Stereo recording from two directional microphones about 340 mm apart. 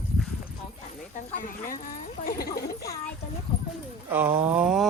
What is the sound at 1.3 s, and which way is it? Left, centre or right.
Speech, left.